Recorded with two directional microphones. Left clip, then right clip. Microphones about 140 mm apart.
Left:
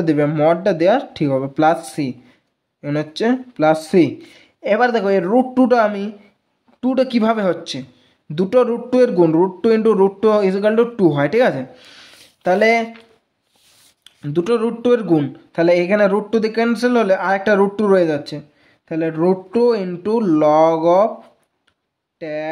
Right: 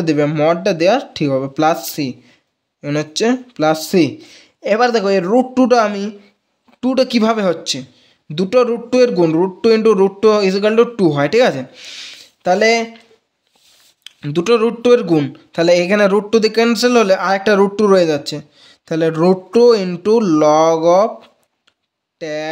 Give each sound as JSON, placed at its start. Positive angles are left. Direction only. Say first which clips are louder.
{"t": 0.0, "sound": "speech", "louder": "right 1 dB", "side_deg": -10}
{"t": 14.0, "sound": "speech", "louder": "right 3 dB", "side_deg": -15}
{"t": 18.9, "sound": "speech", "louder": "right 4 dB", "side_deg": -45}
{"t": 22.2, "sound": "speech", "louder": "right 2 dB", "side_deg": -25}